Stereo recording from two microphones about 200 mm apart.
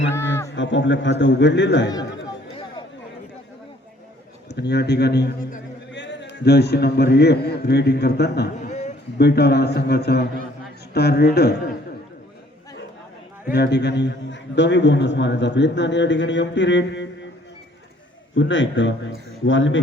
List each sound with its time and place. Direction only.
0.5 s a man's voice: 65° left (ahead or behind)
4.4 s a man's voice: 55° left (ahead or behind)
5.9 s a man's voice: 60° left (ahead or behind)
8.6 s a sound: 35° left (ahead or behind)
9.1 s a man's voice: 55° left (ahead or behind)
13.5 s a man's voice: 55° left (ahead or behind)
18.3 s speech: 70° left (ahead or behind)